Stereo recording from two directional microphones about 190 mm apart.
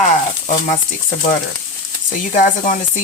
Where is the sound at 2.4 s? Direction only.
45° left (ahead or behind).